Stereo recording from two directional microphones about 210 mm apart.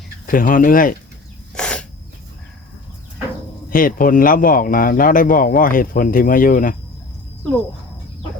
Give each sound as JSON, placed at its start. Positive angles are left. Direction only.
{"t": 0.3, "sound": "speech", "side_deg": 40}
{"t": 1.5, "sound": "a sound", "side_deg": 5}
{"t": 3.7, "sound": "speech", "side_deg": 40}